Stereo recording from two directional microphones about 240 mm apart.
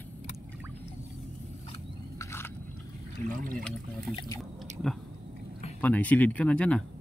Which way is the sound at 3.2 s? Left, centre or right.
Right.